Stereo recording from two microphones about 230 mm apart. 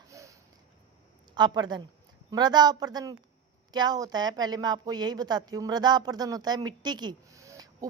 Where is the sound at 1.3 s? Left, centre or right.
Centre.